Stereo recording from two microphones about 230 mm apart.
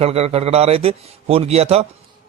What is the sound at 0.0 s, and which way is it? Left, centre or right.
A man's voice, right.